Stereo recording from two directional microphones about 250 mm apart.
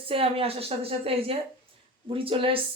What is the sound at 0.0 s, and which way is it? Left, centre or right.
A woman's voice, right.